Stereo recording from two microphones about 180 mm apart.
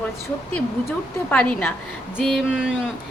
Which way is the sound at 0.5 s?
5° left (ahead or behind).